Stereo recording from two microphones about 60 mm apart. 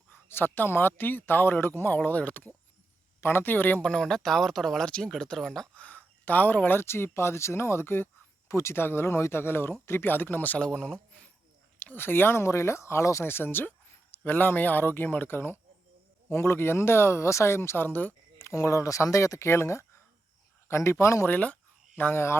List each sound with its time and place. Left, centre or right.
0.1 s speech: left
3.2 s speech: left
3.8 s speech: centre
5.7 s speech: left
8.4 s speech: left
10.6 s speech: centre
11.9 s speech: left
13.2 s speech: left
18.3 s speech: left
21.2 s cricket: left
22.1 s speech: left